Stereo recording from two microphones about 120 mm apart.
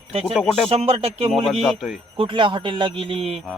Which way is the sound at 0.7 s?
60° right (ahead or behind).